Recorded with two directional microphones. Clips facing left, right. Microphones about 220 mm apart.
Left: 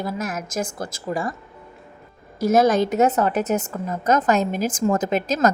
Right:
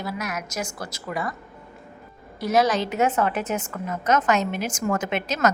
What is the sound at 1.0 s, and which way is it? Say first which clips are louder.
Speech: left 4 dB; 30° left (ahead or behind).